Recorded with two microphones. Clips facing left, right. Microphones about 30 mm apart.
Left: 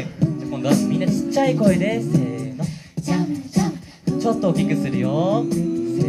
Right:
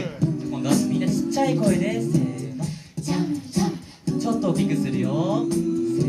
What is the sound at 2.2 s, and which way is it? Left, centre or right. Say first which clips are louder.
Music: left 2 dB; centre.